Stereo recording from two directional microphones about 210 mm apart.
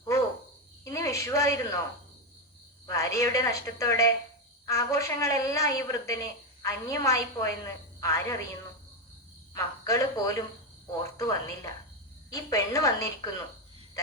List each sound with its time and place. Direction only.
0.9 s a woman's voice: 15° left (ahead or behind)
2.8 s a woman's voice: 15° left (ahead or behind)
9.6 s a woman's voice: 15° left (ahead or behind)